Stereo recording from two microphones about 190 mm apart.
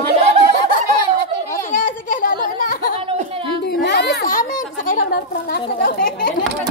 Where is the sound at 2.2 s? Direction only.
45° left (ahead or behind).